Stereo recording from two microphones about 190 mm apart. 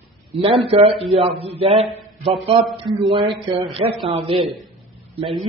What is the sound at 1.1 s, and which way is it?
A man's voice, 30° right (ahead or behind).